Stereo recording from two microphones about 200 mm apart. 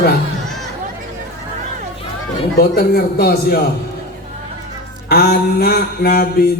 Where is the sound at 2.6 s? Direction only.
50° left (ahead or behind).